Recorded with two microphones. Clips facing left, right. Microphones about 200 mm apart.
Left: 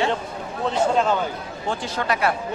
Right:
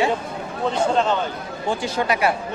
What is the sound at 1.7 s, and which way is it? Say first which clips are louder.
Speech: right 3 dB; 10° right (ahead or behind).